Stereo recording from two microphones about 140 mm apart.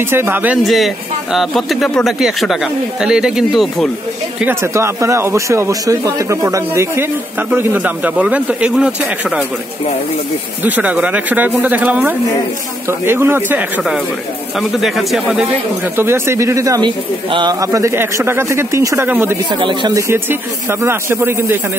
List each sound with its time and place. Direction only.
0.1 s speech: 15° right (ahead or behind)
0.7 s speech: centre (ahead or behind)
4.4 s speech: 15° right (ahead or behind)
10.6 s speech: 10° right (ahead or behind)
14.6 s speech: centre (ahead or behind)
16.0 s speech: 20° right (ahead or behind)
19.6 s a man's voice: 35° right (ahead or behind)
19.9 s speech: 20° right (ahead or behind)